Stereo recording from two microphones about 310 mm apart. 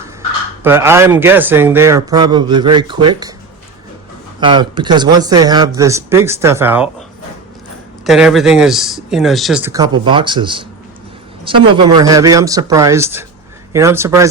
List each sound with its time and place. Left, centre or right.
0.6 s a man's voice: centre
4.4 s a man's voice: centre
8.0 s a man's voice: centre